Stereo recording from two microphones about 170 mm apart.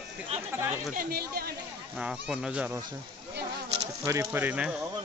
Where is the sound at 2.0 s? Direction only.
5° right (ahead or behind).